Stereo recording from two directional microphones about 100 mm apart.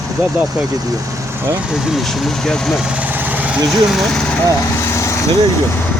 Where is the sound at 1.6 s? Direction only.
5° right (ahead or behind).